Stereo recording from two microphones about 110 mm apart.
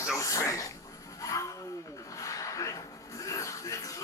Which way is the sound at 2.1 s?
30° left (ahead or behind).